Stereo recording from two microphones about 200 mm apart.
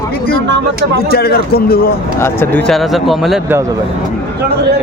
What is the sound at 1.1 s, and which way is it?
Speech, 50° left (ahead or behind).